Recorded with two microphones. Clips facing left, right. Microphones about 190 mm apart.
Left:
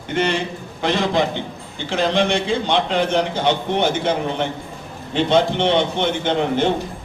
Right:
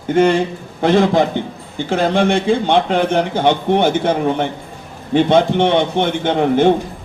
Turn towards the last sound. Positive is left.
turn(degrees=-55)  # may be behind; listen again after turning